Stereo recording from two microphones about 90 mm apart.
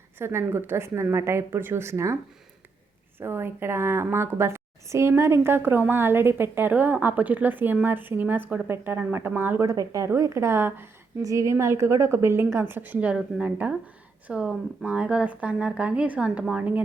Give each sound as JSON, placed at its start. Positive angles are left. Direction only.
{"t": 0.2, "sound": "a woman's voice", "side_deg": -25}
{"t": 3.2, "sound": "a woman's voice", "side_deg": -25}
{"t": 9.6, "sound": "a woman's voice", "side_deg": -40}
{"t": 11.2, "sound": "a woman's voice", "side_deg": -35}